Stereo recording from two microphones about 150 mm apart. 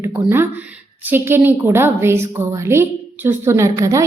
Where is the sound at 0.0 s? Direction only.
20° right (ahead or behind).